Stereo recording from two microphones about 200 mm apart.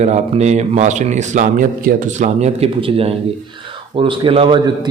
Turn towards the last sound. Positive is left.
turn(degrees=-20)  # may be behind; listen again after turning